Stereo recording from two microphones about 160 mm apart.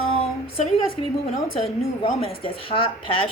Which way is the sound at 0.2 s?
35° left (ahead or behind).